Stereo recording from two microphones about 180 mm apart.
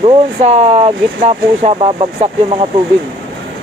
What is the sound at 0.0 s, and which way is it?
Speech, 35° right (ahead or behind).